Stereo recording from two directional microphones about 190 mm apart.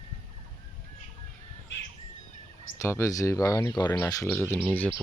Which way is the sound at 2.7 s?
15° left (ahead or behind).